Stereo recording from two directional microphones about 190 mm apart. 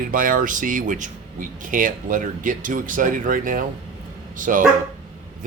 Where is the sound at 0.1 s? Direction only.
45° right (ahead or behind).